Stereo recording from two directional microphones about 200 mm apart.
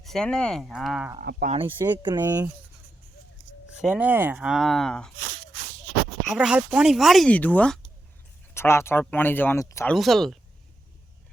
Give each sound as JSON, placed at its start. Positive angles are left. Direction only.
{"t": 0.0, "sound": "speech", "side_deg": 5}
{"t": 1.2, "sound": "speech", "side_deg": -50}
{"t": 1.5, "sound": "speech", "side_deg": -25}
{"t": 3.8, "sound": "speech", "side_deg": -5}
{"t": 6.2, "sound": "speech", "side_deg": -5}
{"t": 9.9, "sound": "speech", "side_deg": 0}